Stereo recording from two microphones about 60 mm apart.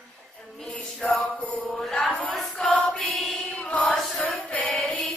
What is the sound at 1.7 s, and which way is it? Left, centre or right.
Mantra, centre.